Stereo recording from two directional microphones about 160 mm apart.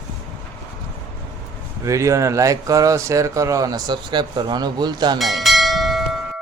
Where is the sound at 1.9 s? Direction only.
20° right (ahead or behind).